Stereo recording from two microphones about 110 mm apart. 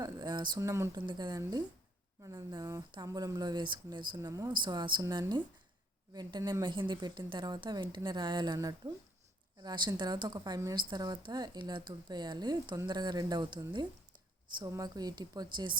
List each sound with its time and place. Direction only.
0.0 s a sound: 35° right (ahead or behind)
0.6 s a woman's voice: 25° right (ahead or behind)
0.9 s speech: 40° right (ahead or behind)
4.3 s speech: 30° right (ahead or behind)
4.6 s a woman's voice: 45° right (ahead or behind)
9.6 s speech: 40° right (ahead or behind)